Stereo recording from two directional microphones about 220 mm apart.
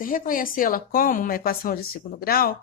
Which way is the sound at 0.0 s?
40° left (ahead or behind).